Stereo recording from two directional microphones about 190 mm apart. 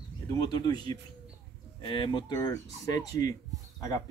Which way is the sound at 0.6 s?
20° left (ahead or behind).